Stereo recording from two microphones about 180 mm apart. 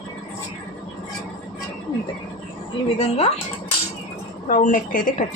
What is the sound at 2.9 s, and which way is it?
Speech, 35° left (ahead or behind).